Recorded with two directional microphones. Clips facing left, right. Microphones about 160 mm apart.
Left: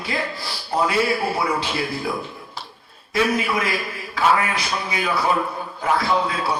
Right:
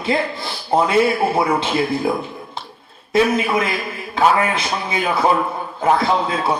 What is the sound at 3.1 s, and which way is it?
A man's voice, 25° right (ahead or behind).